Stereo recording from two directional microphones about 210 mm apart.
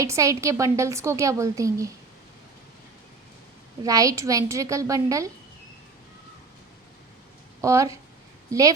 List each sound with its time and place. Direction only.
0.0 s a woman's voice: 15° right (ahead or behind)
3.8 s a woman's voice: 15° right (ahead or behind)
7.6 s a woman's voice: 15° right (ahead or behind)